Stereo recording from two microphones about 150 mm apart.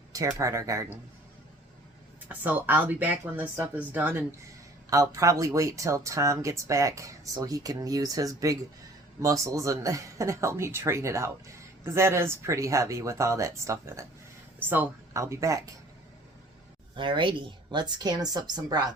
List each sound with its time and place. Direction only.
0.1 s speech: 20° right (ahead or behind)
2.3 s speech: 10° right (ahead or behind)
16.9 s speech: 35° right (ahead or behind)